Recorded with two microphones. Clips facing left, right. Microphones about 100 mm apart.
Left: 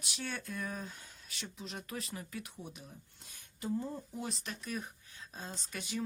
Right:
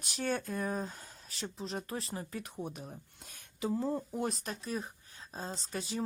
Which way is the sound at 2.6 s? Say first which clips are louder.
Right 7 dB; 50° right (ahead or behind).